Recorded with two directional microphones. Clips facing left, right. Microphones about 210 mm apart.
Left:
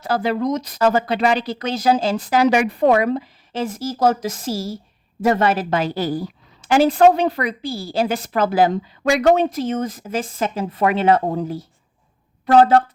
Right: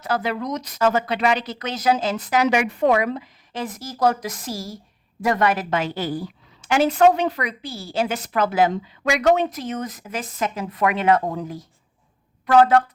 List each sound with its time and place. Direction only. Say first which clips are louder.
0.0 s a woman's voice: left 4 dB; 30° left (ahead or behind)